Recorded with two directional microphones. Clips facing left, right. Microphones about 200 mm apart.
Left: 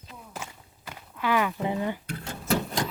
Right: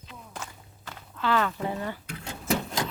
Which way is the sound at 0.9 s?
10° left (ahead or behind).